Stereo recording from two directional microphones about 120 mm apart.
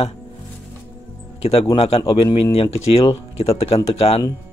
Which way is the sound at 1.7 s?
55° left (ahead or behind).